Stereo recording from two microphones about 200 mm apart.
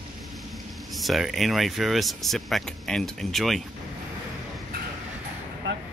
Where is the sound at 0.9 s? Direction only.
Centre (ahead or behind).